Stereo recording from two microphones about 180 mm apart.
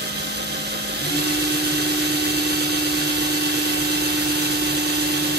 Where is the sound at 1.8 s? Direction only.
65° right (ahead or behind).